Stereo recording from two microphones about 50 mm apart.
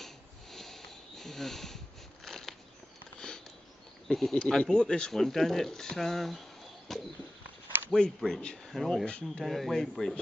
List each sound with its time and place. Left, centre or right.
0.0 s sniff: centre
2.2 s a sound: centre
4.1 s speech: centre
8.3 s speech: left
8.6 s speech: centre
9.0 s speech: left
9.4 s speech: centre
9.8 s speech: centre